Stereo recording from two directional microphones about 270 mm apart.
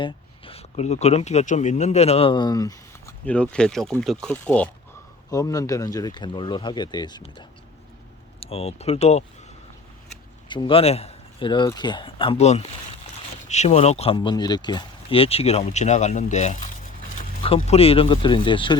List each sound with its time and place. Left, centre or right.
0.0 s speech: left
10.5 s speech: centre